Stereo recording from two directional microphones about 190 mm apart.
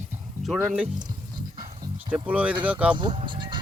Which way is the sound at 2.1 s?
5° right (ahead or behind).